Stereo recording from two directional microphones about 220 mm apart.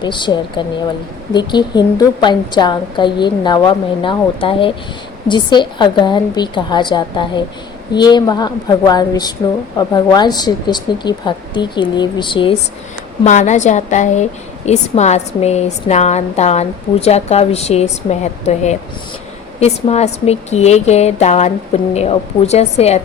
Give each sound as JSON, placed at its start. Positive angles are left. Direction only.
{"t": 0.0, "sound": "a woman's voice", "side_deg": 20}
{"t": 13.2, "sound": "a woman's voice", "side_deg": 35}